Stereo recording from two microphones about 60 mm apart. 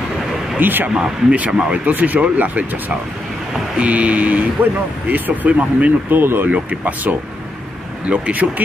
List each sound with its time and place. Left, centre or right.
0.6 s speech: right
1.3 s speech: right
1.9 s speech: right
6.1 s speech: right
6.5 s speech: right